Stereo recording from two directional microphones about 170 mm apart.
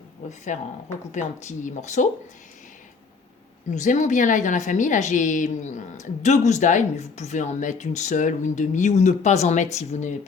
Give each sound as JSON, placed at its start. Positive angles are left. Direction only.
{"t": 0.3, "sound": "a woman's voice", "side_deg": 45}
{"t": 3.7, "sound": "a woman's voice", "side_deg": 45}